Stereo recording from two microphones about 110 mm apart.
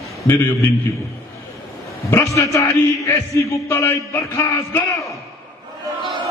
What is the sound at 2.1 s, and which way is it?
Speech, 25° left (ahead or behind).